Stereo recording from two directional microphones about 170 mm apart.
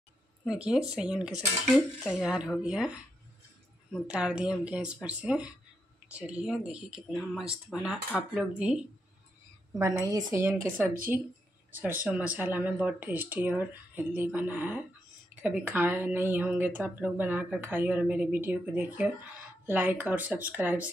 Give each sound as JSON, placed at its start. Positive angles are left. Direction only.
{"t": 0.5, "sound": "speech", "side_deg": -5}
{"t": 4.1, "sound": "speech", "side_deg": -5}
{"t": 9.9, "sound": "speech", "side_deg": -20}